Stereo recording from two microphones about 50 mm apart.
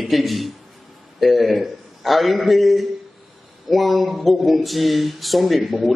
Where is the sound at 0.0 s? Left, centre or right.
Centre.